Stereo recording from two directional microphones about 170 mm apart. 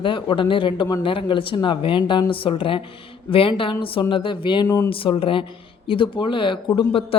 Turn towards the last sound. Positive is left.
turn(degrees=25)  # may be behind; listen again after turning